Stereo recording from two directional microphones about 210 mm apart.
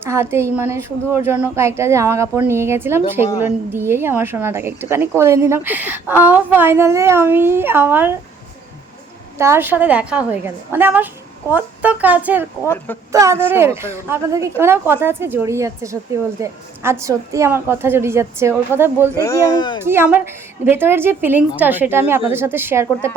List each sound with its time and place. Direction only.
0.0 s a woman's voice: 10° right (ahead or behind)
9.4 s a woman's voice: 10° right (ahead or behind)
12.6 s speech: 10° left (ahead or behind)
13.1 s a woman's voice: 15° right (ahead or behind)
19.2 s speech: 15° left (ahead or behind)
19.8 s a woman's voice: 10° right (ahead or behind)